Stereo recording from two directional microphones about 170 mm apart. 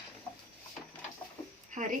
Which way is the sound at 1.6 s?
45° right (ahead or behind).